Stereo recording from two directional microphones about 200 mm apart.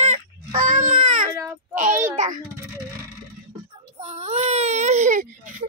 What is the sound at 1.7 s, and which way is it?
Speech, 40° right (ahead or behind).